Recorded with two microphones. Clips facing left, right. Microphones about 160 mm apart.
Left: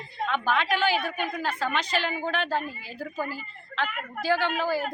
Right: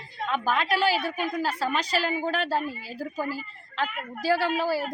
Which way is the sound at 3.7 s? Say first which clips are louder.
Even; 40° right (ahead or behind).